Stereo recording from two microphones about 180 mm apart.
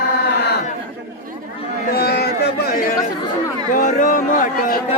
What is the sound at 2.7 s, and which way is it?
Speech, 50° left (ahead or behind).